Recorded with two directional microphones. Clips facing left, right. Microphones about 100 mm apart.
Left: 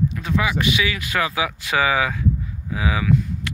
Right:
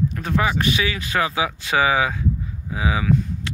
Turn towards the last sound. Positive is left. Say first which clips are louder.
# even
turn(degrees=-30)  # may be behind; listen again after turning